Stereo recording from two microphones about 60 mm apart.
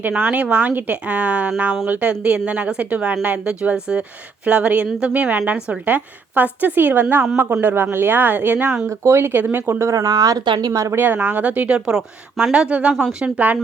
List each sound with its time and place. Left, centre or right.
0.0 s a woman's voice: right
5.8 s a woman's voice: right
8.9 s speech: right
9.9 s speech: right
10.9 s a woman's voice: right